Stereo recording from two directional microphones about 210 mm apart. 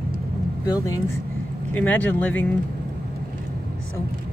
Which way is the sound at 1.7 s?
5° left (ahead or behind).